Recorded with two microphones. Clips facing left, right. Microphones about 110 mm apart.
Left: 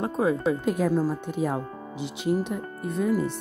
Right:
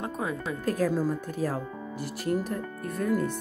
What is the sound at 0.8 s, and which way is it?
Speech, 15° left (ahead or behind).